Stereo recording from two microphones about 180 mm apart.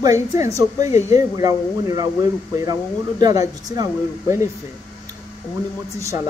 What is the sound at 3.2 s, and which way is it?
Speech, 20° right (ahead or behind).